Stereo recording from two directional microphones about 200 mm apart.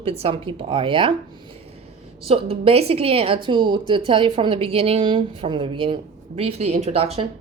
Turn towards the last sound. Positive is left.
turn(degrees=-30)  # may be behind; listen again after turning